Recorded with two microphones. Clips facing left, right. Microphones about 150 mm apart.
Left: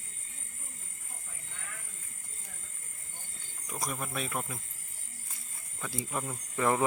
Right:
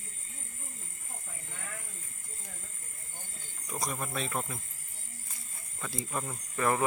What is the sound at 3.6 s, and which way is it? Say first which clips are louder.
Speech: right 1 dB; centre (ahead or behind).